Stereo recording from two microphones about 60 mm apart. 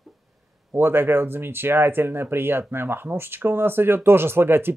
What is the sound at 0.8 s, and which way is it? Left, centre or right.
Speech, right.